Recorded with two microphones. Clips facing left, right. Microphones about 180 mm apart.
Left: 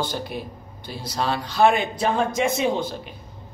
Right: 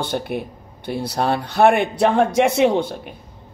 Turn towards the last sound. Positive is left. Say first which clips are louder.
# right 6 dB
turn(degrees=-60)  # may be behind; listen again after turning